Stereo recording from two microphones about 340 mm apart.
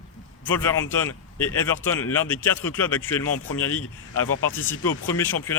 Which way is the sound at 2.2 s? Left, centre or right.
Centre.